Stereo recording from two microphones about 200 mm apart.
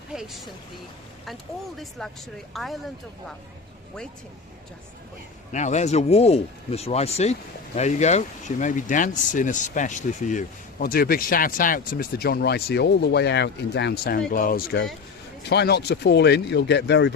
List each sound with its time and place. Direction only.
0.1 s speech: centre (ahead or behind)
2.0 s speech: 5° left (ahead or behind)
5.5 s speech: 35° left (ahead or behind); by 17.2 s 60° left (ahead or behind)